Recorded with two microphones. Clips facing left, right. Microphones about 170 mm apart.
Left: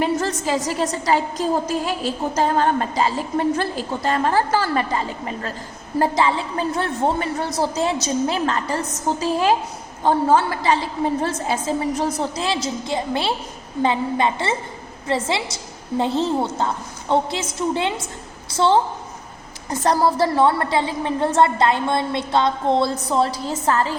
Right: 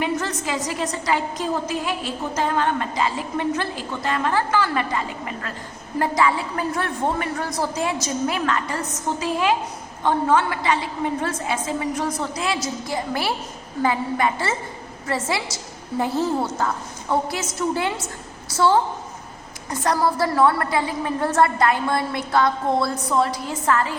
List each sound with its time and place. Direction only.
0.0 s a woman's voice: 35° left (ahead or behind)
19.8 s a woman's voice: 30° left (ahead or behind)